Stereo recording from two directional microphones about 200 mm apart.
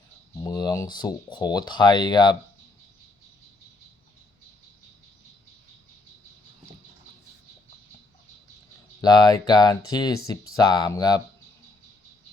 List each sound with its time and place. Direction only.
0.4 s speech: 20° left (ahead or behind)
9.0 s speech: 20° left (ahead or behind)